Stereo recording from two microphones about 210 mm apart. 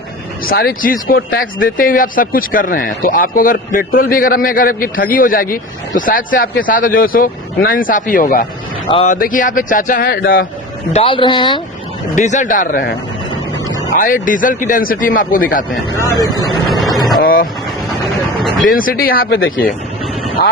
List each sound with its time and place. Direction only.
0.4 s speech: 45° left (ahead or behind)
8.9 s speech: 30° left (ahead or behind)
9.1 s speech: 40° left (ahead or behind)
10.9 s speech: 25° left (ahead or behind)
12.1 s speech: 35° left (ahead or behind)
13.9 s speech: 40° left (ahead or behind)
15.9 s speech: 20° left (ahead or behind)
16.6 s vehicle: centre (ahead or behind)
17.2 s speech: 45° left (ahead or behind)
18.7 s speech: 40° left (ahead or behind)